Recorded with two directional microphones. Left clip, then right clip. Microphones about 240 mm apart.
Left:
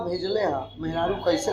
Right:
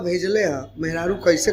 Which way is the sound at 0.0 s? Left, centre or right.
Right.